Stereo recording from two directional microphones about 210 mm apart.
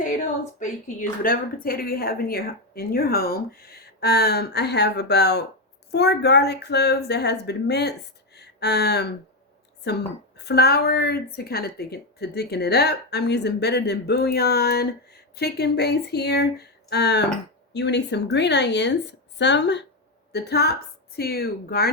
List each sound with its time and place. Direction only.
0.6 s a woman's voice: 40° left (ahead or behind)